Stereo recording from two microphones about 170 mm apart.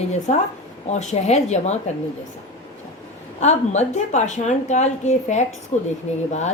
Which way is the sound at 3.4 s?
40° left (ahead or behind).